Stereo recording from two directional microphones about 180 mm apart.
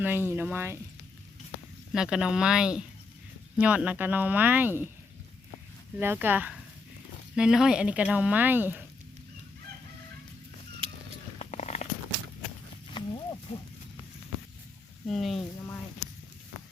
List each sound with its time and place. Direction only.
0.0 s speech: 10° right (ahead or behind)
1.9 s speech: 5° right (ahead or behind)
6.0 s speech: 10° right (ahead or behind)
11.3 s a sound: 40° left (ahead or behind)
12.9 s a sound: 25° left (ahead or behind)
13.5 s speech: 40° left (ahead or behind)
15.0 s speech: centre (ahead or behind)